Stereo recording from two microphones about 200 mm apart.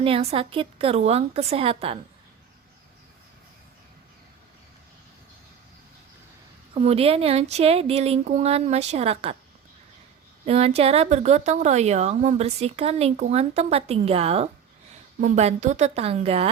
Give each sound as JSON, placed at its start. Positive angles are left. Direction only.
{"t": 0.0, "sound": "a woman's voice", "side_deg": -30}
{"t": 6.7, "sound": "a woman's voice", "side_deg": -30}
{"t": 10.4, "sound": "a woman's voice", "side_deg": -30}